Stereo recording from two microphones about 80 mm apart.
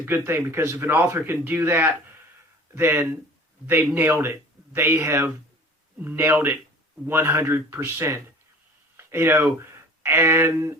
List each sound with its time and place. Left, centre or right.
0.0 s speech: right
1.5 s speech: right